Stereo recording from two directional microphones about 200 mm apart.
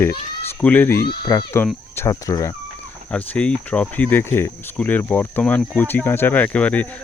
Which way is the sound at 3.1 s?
5° left (ahead or behind).